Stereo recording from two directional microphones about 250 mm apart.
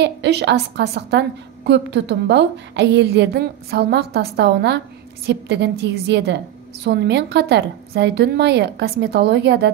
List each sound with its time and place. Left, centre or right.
0.0 s a woman's voice: right